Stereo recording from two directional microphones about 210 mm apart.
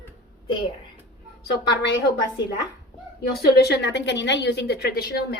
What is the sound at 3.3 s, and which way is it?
A woman's voice, 50° left (ahead or behind).